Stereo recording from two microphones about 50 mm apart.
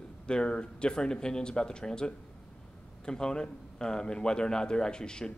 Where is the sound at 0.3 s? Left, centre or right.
Centre.